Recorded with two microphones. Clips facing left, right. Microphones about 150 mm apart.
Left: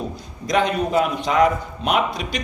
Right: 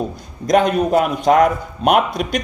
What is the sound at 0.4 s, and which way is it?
Speech, 50° right (ahead or behind).